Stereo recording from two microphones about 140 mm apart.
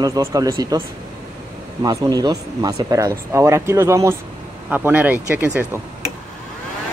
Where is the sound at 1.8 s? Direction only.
25° right (ahead or behind).